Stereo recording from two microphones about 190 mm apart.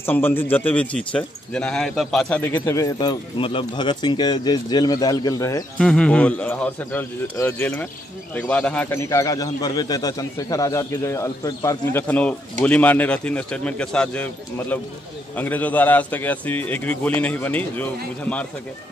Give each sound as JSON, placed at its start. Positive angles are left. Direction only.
{"t": 0.0, "sound": "speech", "side_deg": 10}
{"t": 5.8, "sound": "speech", "side_deg": 5}